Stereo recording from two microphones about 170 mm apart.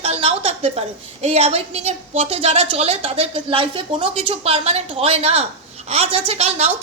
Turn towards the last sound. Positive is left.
turn(degrees=-40)  # may be behind; listen again after turning